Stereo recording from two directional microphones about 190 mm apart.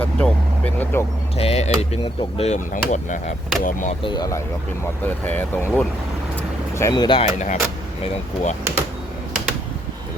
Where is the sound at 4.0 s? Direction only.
25° left (ahead or behind).